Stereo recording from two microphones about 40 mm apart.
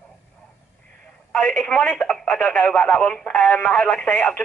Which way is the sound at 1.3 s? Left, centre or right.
Left.